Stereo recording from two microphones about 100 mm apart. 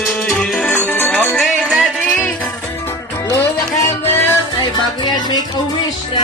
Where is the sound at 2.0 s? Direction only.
15° left (ahead or behind).